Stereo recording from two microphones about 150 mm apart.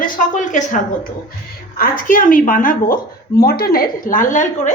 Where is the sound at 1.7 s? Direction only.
70° left (ahead or behind).